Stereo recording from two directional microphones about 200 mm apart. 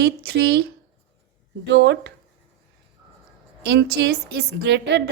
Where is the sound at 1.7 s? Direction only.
60° right (ahead or behind).